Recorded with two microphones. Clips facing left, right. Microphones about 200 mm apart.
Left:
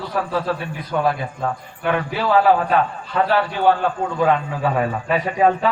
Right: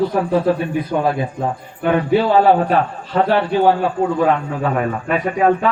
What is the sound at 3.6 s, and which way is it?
Speech, 10° right (ahead or behind).